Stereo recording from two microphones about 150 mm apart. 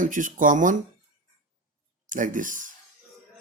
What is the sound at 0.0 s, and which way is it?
Speech, 60° right (ahead or behind).